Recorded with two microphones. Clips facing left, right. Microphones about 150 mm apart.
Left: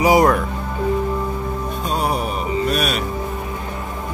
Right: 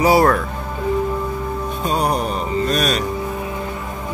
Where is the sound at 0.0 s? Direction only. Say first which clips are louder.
Even; 15° left (ahead or behind).